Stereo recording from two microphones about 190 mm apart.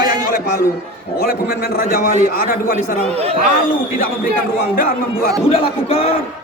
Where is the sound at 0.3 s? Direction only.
50° left (ahead or behind).